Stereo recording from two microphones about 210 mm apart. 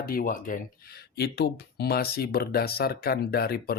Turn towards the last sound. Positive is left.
turn(degrees=45)  # may be behind; listen again after turning